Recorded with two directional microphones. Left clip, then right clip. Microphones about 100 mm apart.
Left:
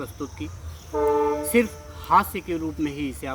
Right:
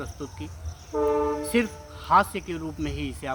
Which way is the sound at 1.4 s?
25° right (ahead or behind).